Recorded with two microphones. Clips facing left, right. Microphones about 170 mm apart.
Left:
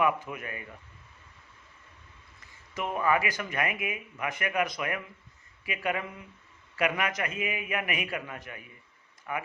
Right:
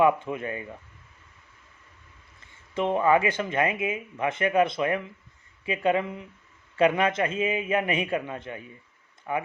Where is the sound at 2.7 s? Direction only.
25° right (ahead or behind).